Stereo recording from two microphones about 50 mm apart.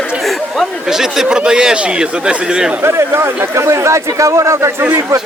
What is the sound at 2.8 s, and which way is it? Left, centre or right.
Speech, right.